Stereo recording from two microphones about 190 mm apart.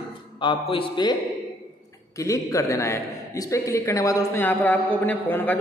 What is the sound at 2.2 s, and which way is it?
A woman's voice, 15° left (ahead or behind).